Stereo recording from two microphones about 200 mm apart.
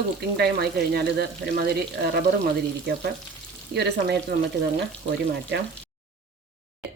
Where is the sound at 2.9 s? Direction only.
50° right (ahead or behind).